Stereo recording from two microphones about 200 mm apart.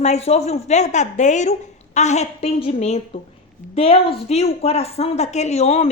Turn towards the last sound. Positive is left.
turn(degrees=30)  # may be behind; listen again after turning